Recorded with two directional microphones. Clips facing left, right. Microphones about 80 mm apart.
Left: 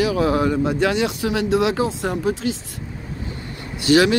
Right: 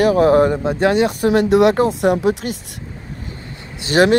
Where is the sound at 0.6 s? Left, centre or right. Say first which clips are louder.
Right 4 dB; right.